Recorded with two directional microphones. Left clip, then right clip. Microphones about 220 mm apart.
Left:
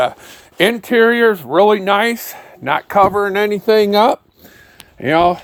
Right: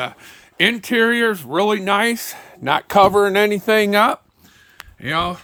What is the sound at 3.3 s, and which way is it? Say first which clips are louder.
Speech: left 2 dB; 25° right (ahead or behind).